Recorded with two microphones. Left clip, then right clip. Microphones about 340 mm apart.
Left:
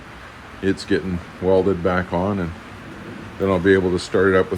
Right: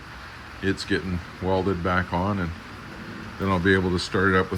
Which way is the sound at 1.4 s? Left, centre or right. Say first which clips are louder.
Left 7 dB; left.